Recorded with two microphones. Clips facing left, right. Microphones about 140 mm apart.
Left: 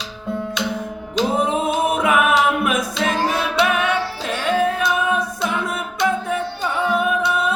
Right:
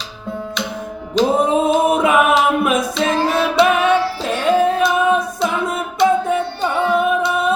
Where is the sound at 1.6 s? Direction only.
25° right (ahead or behind).